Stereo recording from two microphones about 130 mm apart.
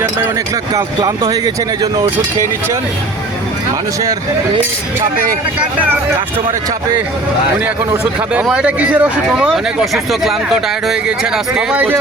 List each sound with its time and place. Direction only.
0.7 s speech: 25° right (ahead or behind)
8.3 s speech: 10° right (ahead or behind)